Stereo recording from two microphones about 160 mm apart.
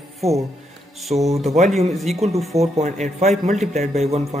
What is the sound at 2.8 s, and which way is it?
Speech, 45° right (ahead or behind).